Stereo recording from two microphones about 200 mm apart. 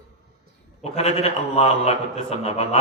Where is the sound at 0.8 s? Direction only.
30° left (ahead or behind).